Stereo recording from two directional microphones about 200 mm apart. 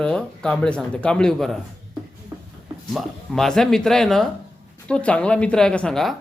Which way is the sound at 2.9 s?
Centre (ahead or behind).